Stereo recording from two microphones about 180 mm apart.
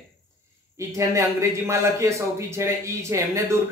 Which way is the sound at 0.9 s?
15° right (ahead or behind).